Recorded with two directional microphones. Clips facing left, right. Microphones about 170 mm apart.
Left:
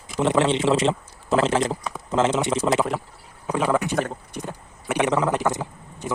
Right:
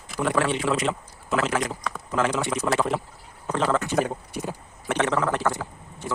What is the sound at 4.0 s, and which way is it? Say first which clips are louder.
Speech: right 1 dB; 5° right (ahead or behind).